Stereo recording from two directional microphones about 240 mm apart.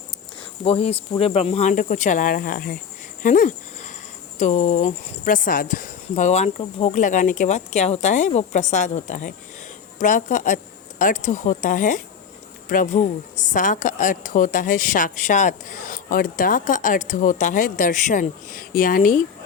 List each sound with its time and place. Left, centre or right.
0.6 s speech: left
3.2 s a sound: left
4.4 s a woman's voice: left